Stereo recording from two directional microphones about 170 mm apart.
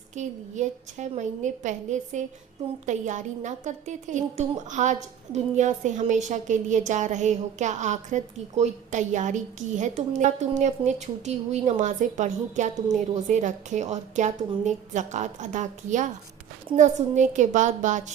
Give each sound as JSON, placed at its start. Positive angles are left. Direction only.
{"t": 0.2, "sound": "a woman's voice", "side_deg": -45}